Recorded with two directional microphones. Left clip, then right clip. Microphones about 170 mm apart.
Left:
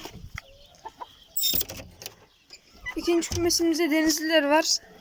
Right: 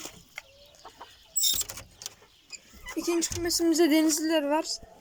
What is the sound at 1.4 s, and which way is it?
Vehicle, 55° left (ahead or behind).